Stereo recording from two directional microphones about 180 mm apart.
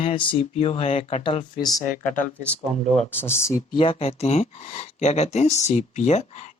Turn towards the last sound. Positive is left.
turn(degrees=40)  # may be behind; listen again after turning